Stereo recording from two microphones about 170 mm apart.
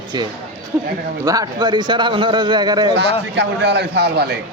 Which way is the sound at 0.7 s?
15° right (ahead or behind).